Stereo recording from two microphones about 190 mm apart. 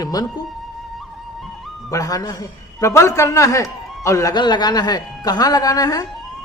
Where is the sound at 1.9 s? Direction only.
20° left (ahead or behind).